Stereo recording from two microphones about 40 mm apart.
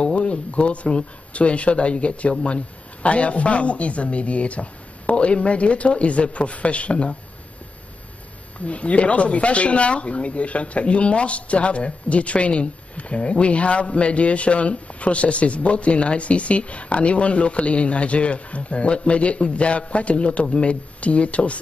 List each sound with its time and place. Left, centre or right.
0.0 s speech: left
8.5 s speech: left